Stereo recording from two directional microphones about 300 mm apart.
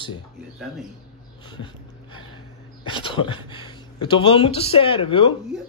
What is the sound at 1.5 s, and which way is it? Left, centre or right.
Dog, centre.